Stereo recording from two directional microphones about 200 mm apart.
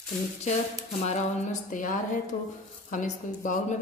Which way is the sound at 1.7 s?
40° left (ahead or behind).